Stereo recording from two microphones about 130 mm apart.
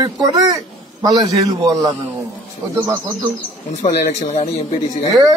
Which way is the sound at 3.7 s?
60° left (ahead or behind).